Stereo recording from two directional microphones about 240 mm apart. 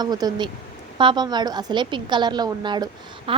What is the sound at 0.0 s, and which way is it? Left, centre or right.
A woman's voice, centre.